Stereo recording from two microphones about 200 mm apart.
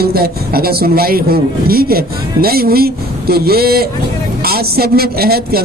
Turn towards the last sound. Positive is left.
turn(degrees=-50)  # may be behind; listen again after turning